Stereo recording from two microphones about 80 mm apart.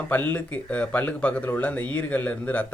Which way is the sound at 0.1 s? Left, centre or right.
Left.